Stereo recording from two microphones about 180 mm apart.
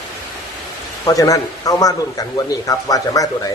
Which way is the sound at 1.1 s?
20° left (ahead or behind).